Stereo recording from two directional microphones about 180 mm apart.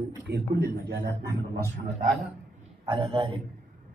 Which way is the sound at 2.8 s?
25° right (ahead or behind).